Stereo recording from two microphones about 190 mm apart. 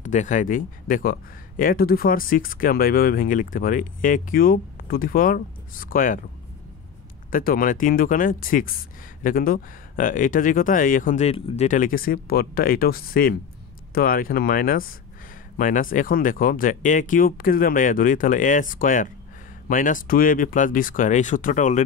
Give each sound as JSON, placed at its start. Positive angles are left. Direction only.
{"t": 0.0, "sound": "speech", "side_deg": 40}
{"t": 7.2, "sound": "speech", "side_deg": 45}